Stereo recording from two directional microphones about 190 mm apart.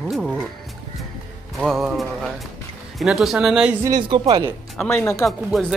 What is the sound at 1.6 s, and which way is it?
Music, centre (ahead or behind).